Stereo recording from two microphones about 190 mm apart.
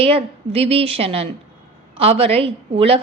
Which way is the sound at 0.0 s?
30° right (ahead or behind).